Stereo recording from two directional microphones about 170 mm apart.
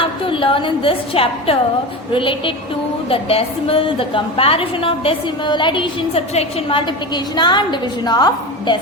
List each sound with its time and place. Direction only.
0.0 s a woman's voice: 30° left (ahead or behind)